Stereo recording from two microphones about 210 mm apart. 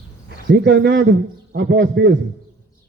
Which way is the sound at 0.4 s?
50° right (ahead or behind).